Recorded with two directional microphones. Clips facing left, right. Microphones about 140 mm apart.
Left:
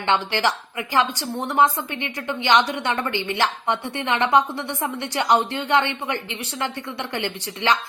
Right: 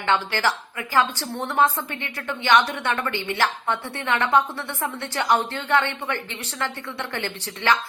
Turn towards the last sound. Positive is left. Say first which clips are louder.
# left 1 dB
turn(degrees=20)  # may be behind; listen again after turning